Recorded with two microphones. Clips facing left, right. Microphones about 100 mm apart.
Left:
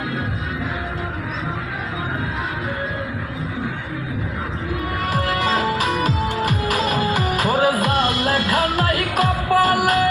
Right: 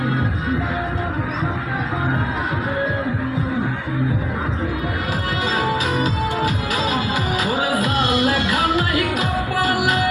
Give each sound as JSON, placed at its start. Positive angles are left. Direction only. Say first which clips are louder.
{"t": 5.3, "sound": "music", "louder": "right 1 dB", "side_deg": 50}